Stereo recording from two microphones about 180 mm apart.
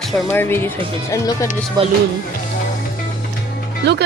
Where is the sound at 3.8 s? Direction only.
70° right (ahead or behind).